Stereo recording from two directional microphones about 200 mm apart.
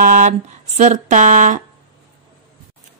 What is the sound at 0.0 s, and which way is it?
Speech, 40° right (ahead or behind).